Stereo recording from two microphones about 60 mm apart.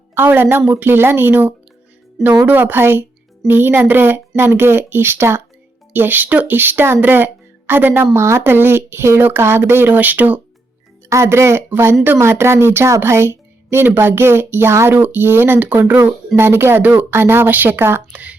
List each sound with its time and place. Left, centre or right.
0.1 s speech: right
8.1 s speech: right
9.9 s speech: right
11.1 s speech: right
14.9 s speech: right
18.1 s speech: right